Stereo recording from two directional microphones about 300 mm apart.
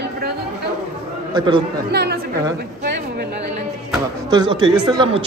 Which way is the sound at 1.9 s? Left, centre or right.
Right.